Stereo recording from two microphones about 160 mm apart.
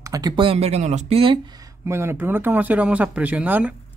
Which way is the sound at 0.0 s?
25° right (ahead or behind).